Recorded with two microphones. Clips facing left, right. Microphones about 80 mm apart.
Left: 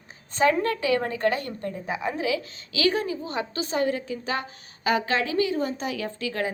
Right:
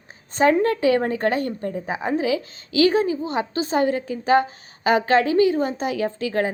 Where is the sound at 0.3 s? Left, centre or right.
Right.